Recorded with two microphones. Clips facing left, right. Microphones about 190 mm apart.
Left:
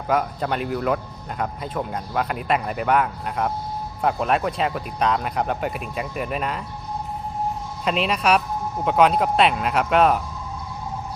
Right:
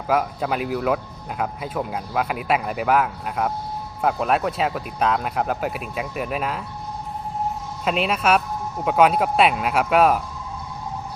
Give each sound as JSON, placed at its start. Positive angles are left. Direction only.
{"t": 0.1, "sound": "speech", "side_deg": -5}
{"t": 7.9, "sound": "speech", "side_deg": 0}